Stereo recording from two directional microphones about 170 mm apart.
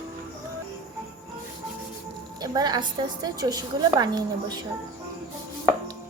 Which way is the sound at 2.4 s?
25° right (ahead or behind).